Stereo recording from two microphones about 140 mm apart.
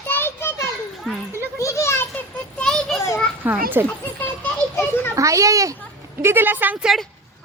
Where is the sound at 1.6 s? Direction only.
20° left (ahead or behind).